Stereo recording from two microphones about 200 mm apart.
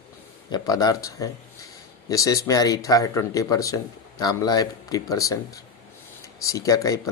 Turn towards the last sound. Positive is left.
turn(degrees=15)  # may be behind; listen again after turning